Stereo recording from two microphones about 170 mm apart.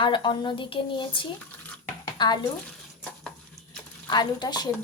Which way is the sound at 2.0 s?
25° left (ahead or behind).